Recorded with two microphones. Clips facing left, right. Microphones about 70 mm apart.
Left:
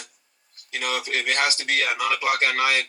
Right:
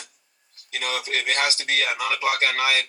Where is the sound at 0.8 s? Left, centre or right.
Left.